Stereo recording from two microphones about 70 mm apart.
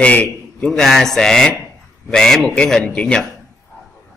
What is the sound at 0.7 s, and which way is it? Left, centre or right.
A man's voice, centre.